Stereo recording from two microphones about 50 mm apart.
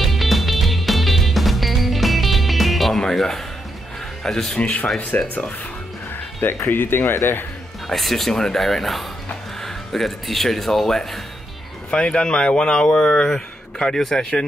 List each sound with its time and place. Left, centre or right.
0.0 s music: centre
4.2 s speech: centre
4.6 s speech: left
6.7 s speech: left
7.9 s speech: centre
11.9 s speech: centre